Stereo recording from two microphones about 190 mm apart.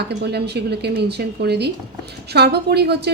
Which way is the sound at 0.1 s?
60° right (ahead or behind).